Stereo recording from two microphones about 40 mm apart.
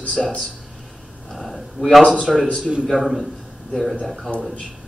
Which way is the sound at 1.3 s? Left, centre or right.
Centre.